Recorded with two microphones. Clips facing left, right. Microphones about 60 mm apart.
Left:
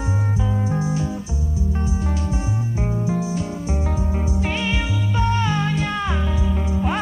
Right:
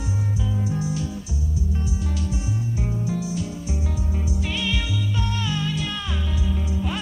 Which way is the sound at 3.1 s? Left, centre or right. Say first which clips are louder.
Left 4 dB; left.